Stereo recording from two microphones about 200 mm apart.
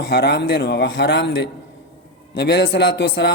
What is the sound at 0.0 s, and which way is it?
A man's voice, 55° left (ahead or behind).